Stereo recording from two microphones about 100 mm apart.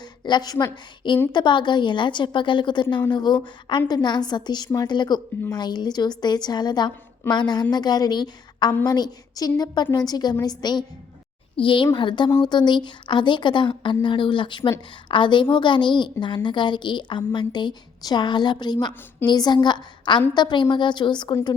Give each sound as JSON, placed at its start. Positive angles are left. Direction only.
{"t": 0.3, "sound": "a woman's voice", "side_deg": 45}
{"t": 11.5, "sound": "a woman's voice", "side_deg": 55}